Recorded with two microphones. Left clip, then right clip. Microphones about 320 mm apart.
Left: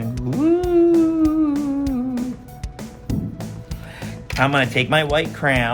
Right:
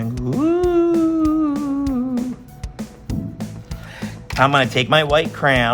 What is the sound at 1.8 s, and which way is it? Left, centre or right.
Music, centre.